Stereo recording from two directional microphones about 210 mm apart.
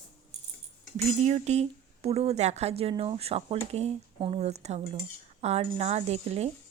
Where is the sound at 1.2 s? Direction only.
30° right (ahead or behind).